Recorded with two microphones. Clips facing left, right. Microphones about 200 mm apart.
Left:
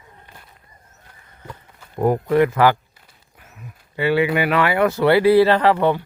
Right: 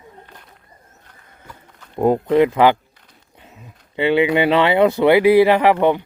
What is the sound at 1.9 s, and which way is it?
Speech, 20° right (ahead or behind).